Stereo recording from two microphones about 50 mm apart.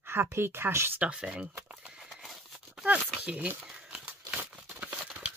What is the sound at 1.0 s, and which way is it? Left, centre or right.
Speech, centre.